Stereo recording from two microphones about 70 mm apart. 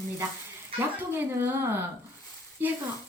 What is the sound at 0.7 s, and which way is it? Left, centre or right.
Speech, right.